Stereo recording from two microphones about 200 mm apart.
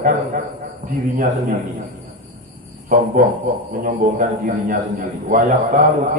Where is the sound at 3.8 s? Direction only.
40° right (ahead or behind).